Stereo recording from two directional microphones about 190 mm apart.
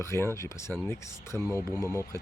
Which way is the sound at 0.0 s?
15° left (ahead or behind).